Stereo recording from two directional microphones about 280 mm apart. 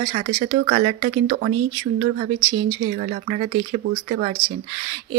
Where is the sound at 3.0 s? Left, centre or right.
Right.